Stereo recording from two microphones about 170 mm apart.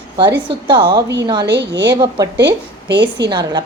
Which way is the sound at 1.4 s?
85° right.